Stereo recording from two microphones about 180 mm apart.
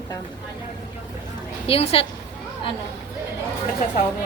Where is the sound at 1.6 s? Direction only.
35° left (ahead or behind).